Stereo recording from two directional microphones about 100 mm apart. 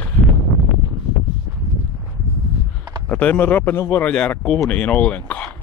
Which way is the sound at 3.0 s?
15° left (ahead or behind).